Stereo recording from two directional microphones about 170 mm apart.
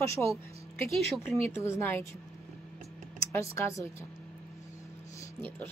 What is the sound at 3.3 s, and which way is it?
Speech, 15° left (ahead or behind).